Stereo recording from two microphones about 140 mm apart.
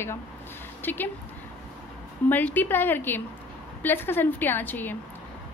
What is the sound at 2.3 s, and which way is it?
A woman's voice, 15° left (ahead or behind).